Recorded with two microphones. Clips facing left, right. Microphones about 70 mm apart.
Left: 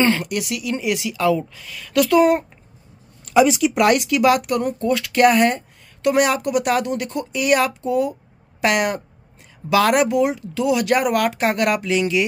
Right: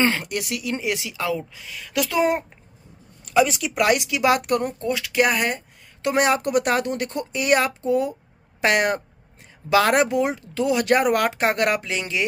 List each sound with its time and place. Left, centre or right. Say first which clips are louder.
0.0 s a woman's voice: left 3 dB; right
3.3 s speech: left 4 dB; centre
4.0 s a woman's voice: left 4 dB; right
4.8 s speech: left 8 dB; centre
6.0 s speech: left 2 dB; right